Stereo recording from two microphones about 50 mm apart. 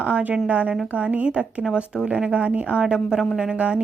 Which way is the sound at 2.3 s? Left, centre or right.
Right.